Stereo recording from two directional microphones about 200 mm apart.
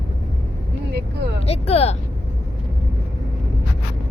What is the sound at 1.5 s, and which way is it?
Vehicle, 30° left (ahead or behind).